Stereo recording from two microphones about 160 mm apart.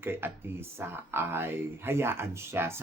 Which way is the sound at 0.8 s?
15° right (ahead or behind).